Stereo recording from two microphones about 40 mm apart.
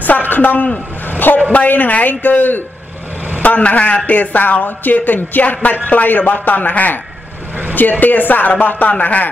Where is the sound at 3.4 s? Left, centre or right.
Left.